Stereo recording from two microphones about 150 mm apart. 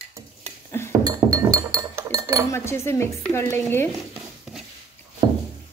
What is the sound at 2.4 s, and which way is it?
Cutlery, 15° left (ahead or behind).